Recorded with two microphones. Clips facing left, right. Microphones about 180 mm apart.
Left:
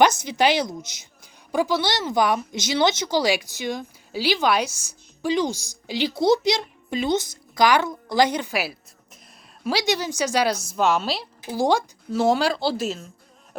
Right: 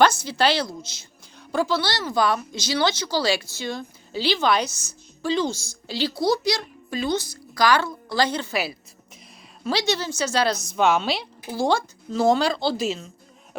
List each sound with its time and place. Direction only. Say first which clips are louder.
0.0 s speech: left 1 dB; 20° left (ahead or behind); by 11.3 s centre (ahead or behind)
11.4 s speech: left 1 dB; 15° left (ahead or behind)
12.1 s speech: even; 5° left (ahead or behind)